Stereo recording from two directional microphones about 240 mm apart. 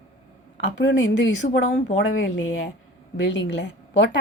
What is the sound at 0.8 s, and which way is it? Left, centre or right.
Speech, left.